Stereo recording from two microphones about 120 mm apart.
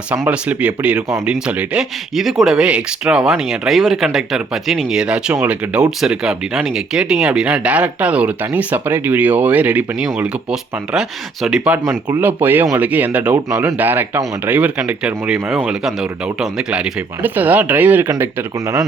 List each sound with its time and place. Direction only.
0.1 s speech: 10° right (ahead or behind)